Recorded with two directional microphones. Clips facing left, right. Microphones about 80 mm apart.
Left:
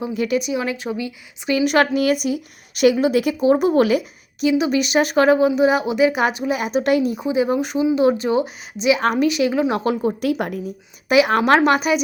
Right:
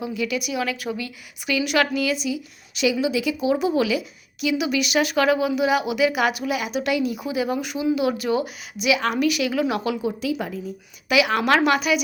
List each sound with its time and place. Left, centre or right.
0.0 s a woman's voice: left
1.5 s speech: left
10.2 s a woman's voice: left
11.1 s speech: left